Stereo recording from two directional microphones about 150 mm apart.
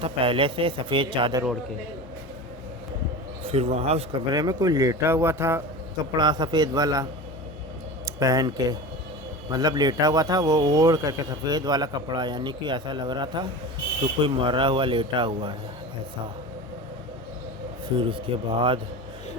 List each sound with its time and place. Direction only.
0.0 s speech: 35° right (ahead or behind)
3.4 s speech: 45° right (ahead or behind)
4.3 s a man's voice: 25° right (ahead or behind)
6.1 s a man's voice: 30° right (ahead or behind)
17.9 s speech: 35° right (ahead or behind)